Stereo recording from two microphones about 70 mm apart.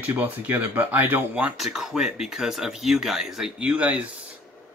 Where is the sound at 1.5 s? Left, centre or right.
Centre.